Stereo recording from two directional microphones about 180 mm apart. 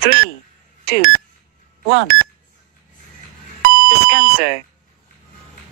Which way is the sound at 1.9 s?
65° right (ahead or behind).